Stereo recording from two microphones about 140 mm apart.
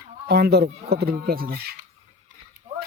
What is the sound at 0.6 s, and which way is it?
Speech, 90° right.